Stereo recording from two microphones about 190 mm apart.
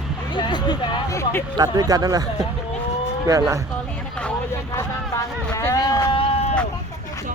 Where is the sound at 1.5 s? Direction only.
20° right (ahead or behind).